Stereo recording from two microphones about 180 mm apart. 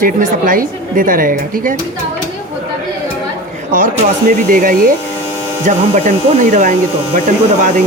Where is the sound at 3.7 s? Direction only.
50° right (ahead or behind).